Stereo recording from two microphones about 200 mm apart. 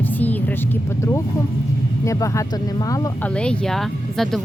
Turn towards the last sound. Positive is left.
turn(degrees=0)  # may be behind; listen again after turning